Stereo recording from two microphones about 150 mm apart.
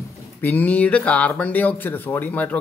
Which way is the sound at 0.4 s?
15° left (ahead or behind).